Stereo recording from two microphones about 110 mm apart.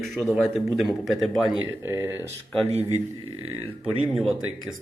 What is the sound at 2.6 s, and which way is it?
Speech, 70° right (ahead or behind).